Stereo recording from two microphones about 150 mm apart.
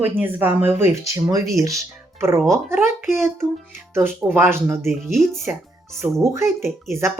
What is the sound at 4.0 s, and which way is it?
Speech, 15° right (ahead or behind).